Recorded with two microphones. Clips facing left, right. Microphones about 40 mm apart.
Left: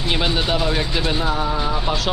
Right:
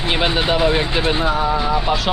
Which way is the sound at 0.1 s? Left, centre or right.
Right.